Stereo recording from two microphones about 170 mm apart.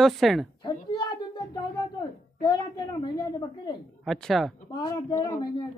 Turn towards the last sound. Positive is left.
turn(degrees=25)  # may be behind; listen again after turning